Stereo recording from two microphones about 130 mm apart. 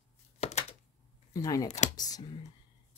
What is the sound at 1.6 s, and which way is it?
Speech, 60° left (ahead or behind).